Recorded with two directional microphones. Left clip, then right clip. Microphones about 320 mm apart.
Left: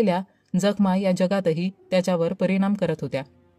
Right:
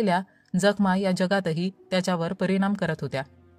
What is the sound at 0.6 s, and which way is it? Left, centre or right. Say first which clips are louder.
Speech: even; right.